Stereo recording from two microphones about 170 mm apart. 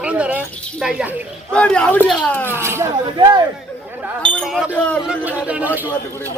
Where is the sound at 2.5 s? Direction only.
15° right (ahead or behind).